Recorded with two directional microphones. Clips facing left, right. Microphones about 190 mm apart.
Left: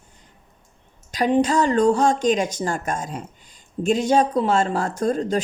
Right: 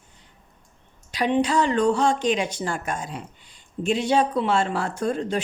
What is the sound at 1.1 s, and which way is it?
Speech, 40° left (ahead or behind).